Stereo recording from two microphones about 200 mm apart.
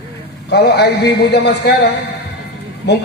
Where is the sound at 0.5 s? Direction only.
55° left (ahead or behind).